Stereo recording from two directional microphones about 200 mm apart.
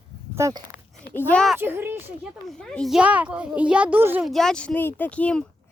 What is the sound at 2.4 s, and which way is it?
A child's voice, centre (ahead or behind).